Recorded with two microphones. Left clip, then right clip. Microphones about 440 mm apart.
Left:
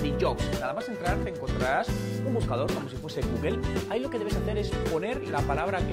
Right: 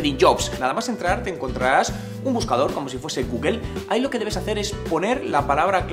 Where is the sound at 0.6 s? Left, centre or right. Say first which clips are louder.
Right 8 dB; left.